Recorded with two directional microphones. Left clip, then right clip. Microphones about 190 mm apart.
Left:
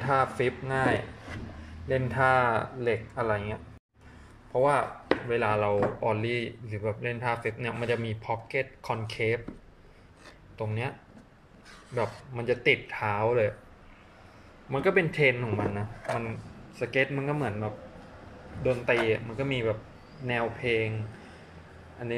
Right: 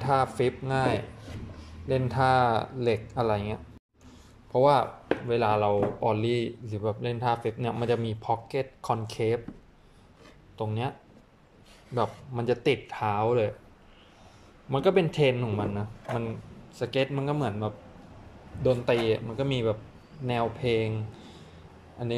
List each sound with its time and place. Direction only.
0.0 s a man's voice: 5° right (ahead or behind)
9.2 s a man's voice: 15° right (ahead or behind)
10.6 s speech: 20° right (ahead or behind)
12.0 s a man's voice: 15° right (ahead or behind)
14.7 s a man's voice: 15° right (ahead or behind)